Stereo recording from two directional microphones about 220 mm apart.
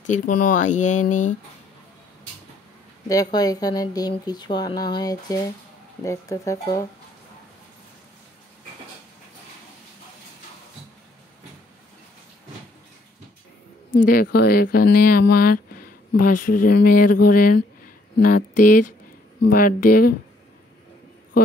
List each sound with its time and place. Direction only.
0.0 s speech: 35° left (ahead or behind)
3.1 s speech: 15° left (ahead or behind)
14.0 s speech: 40° left (ahead or behind)